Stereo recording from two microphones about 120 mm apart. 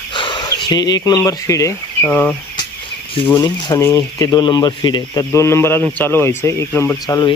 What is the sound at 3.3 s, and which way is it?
Speech, 35° left (ahead or behind).